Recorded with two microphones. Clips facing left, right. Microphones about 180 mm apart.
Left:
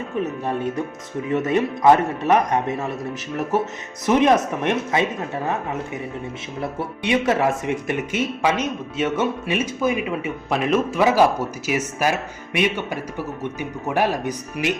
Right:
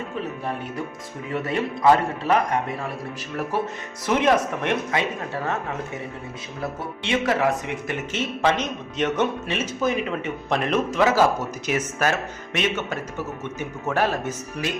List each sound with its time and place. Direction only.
1.3 s speech: 20° left (ahead or behind)
4.0 s speech: 20° left (ahead or behind)
7.0 s speech: 20° left (ahead or behind)
7.9 s speech: 10° left (ahead or behind)
11.0 s speech: 15° left (ahead or behind)